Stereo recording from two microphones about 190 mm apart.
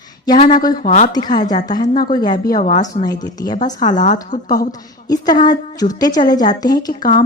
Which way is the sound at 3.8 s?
40° left (ahead or behind).